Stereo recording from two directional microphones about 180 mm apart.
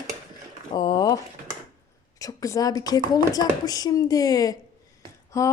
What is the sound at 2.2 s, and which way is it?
Speech, 20° left (ahead or behind).